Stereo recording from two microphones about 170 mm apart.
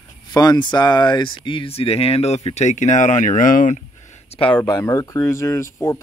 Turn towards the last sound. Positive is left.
turn(degrees=15)  # may be behind; listen again after turning